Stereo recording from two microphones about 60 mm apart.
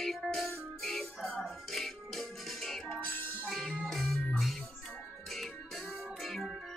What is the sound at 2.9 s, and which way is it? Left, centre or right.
Music, left.